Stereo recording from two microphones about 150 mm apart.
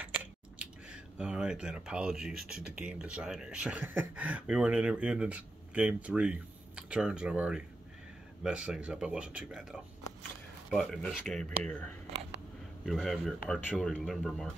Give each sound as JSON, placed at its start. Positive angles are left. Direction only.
{"t": 0.0, "sound": "speech", "side_deg": -10}